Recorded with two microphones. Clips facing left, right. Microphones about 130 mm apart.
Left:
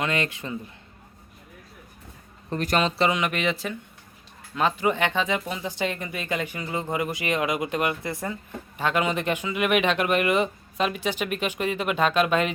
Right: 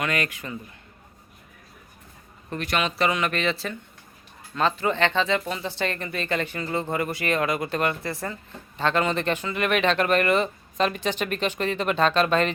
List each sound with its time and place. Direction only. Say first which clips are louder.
0.0 s speech: left 1 dB; 25° left (ahead or behind)
2.5 s speech: left 3 dB; 40° left (ahead or behind)
3.0 s speech: even; 20° left (ahead or behind)